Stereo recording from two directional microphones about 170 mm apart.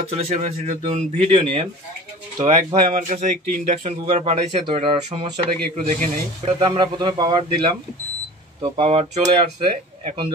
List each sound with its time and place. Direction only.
0.1 s speech: 40° right (ahead or behind)
4.0 s speech: 35° right (ahead or behind)
6.6 s a man's voice: 25° right (ahead or behind)
8.7 s speech: 35° right (ahead or behind)